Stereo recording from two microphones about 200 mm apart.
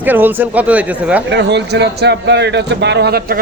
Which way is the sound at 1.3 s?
60° right (ahead or behind).